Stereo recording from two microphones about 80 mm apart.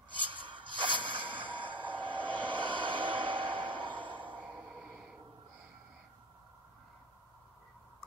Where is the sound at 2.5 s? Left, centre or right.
Right.